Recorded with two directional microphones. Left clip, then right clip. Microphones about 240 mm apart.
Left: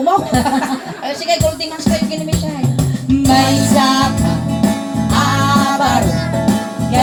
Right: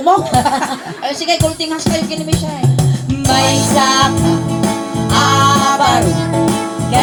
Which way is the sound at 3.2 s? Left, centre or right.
Right.